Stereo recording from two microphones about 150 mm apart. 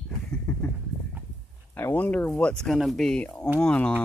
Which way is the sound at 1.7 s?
15° left (ahead or behind).